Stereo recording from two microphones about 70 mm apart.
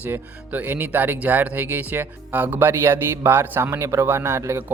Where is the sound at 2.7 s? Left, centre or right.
Right.